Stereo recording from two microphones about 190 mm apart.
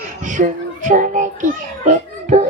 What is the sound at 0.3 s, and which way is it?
A child's voice, 40° right (ahead or behind).